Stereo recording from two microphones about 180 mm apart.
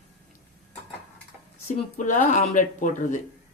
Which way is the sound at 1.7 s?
45° left (ahead or behind).